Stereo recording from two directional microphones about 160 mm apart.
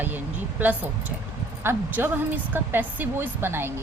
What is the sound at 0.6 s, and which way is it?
Speech, 10° right (ahead or behind).